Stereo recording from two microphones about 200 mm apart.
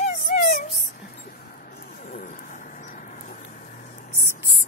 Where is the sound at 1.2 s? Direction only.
50° left (ahead or behind).